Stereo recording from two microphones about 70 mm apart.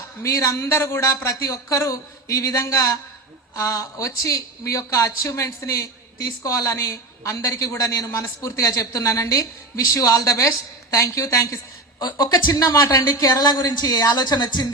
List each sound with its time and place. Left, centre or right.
0.2 s a woman's voice: left
12.5 s a woman's voice: left